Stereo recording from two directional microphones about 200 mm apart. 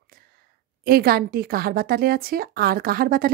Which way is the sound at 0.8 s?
50° right (ahead or behind).